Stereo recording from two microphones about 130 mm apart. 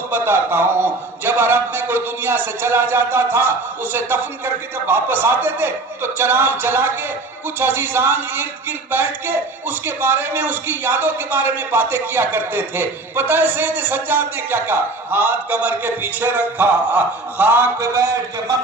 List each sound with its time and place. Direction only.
0.1 s a man's voice: 20° right (ahead or behind)